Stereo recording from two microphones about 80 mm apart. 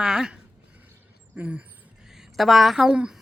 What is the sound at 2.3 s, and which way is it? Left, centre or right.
Speech, centre.